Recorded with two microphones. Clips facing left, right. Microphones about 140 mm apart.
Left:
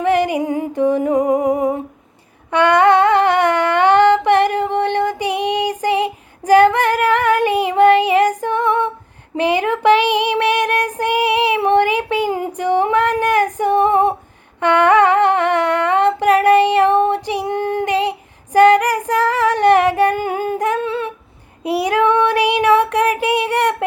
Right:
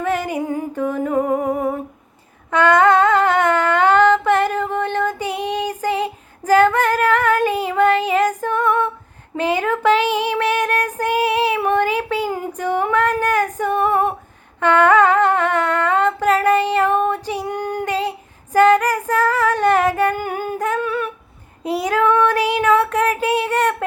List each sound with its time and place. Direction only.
0.3 s music: 15° left (ahead or behind)
0.8 s humming: 15° left (ahead or behind)
3.0 s a sound: 15° left (ahead or behind)
8.4 s female singing: 15° left (ahead or behind)
10.4 s child singing: 15° left (ahead or behind)
14.6 s humming: 15° left (ahead or behind)
17.2 s female singing: 15° left (ahead or behind)
20.8 s a sound: 25° left (ahead or behind)
21.6 s child singing: 10° left (ahead or behind)